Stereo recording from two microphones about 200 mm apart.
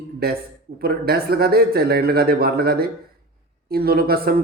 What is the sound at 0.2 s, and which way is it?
A man's voice, 50° right (ahead or behind).